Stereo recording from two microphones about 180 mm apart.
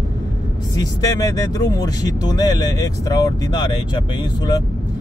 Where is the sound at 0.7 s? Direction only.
20° left (ahead or behind).